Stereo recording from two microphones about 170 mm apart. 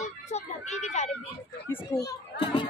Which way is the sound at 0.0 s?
40° left (ahead or behind).